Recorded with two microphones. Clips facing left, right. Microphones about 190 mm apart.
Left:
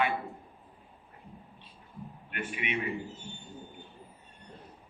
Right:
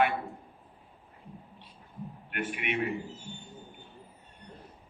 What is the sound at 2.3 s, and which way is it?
Speech, 60° right (ahead or behind).